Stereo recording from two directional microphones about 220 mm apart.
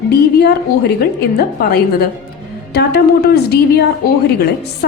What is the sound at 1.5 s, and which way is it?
Speech, 45° left (ahead or behind).